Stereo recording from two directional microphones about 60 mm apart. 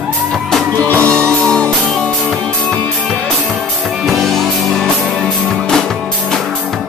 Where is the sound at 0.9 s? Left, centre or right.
Left.